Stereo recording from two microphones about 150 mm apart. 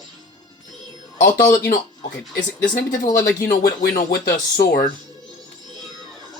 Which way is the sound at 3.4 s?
80° left.